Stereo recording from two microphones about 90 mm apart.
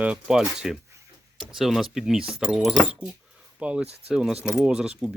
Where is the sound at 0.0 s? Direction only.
10° right (ahead or behind).